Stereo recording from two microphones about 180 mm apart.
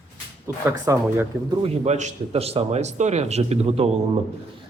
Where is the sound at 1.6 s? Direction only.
40° right (ahead or behind).